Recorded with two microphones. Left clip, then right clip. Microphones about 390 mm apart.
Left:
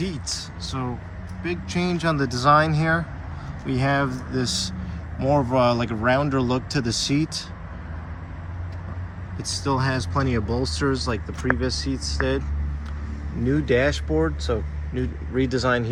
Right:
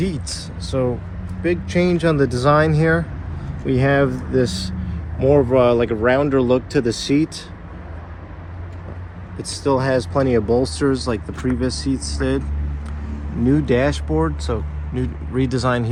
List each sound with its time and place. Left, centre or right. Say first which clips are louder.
0.0 s a sound: right 4 dB; centre
1.5 s speech: right 8 dB; centre
9.4 s speech: right 5 dB; centre
13.7 s speech: left 1 dB; centre
14.1 s speech: right 2 dB; right
15.4 s speech: right 2 dB; centre